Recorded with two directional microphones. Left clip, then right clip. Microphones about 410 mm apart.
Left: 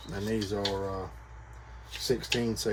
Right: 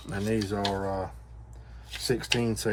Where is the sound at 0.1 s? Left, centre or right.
Right.